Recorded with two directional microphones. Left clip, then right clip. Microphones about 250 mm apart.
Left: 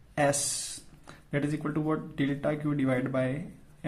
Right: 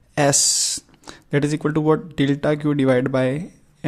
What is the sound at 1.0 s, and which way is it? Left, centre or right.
Speech, right.